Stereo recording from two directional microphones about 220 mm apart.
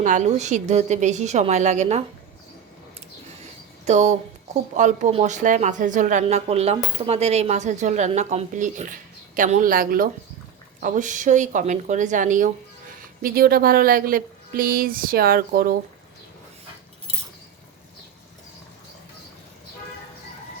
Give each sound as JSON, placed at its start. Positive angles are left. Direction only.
{"t": 0.0, "sound": "speech", "side_deg": -35}
{"t": 3.8, "sound": "speech", "side_deg": -30}